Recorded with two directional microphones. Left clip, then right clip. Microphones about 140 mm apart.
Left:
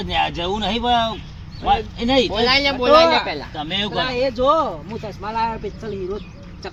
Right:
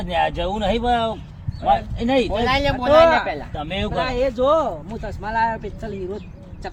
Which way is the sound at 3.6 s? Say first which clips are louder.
Left 4 dB; 90° right.